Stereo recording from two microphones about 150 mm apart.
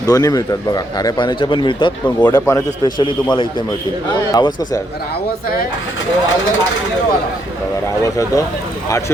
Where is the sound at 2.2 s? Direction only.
20° left (ahead or behind).